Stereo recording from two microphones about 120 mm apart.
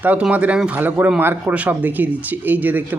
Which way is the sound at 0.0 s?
15° right (ahead or behind).